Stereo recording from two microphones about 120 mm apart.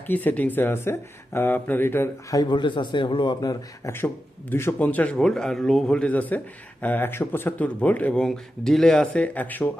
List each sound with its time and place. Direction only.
0.1 s speech: 15° left (ahead or behind)
2.3 s speech: 35° left (ahead or behind)
3.9 s speech: 20° left (ahead or behind)
5.1 s speech: 5° left (ahead or behind)